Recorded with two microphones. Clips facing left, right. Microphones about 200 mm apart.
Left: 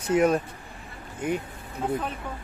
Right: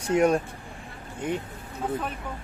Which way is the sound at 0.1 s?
Centre (ahead or behind).